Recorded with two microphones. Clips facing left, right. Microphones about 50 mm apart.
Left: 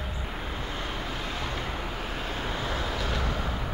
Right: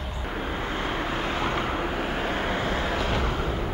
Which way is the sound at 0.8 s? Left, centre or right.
Right.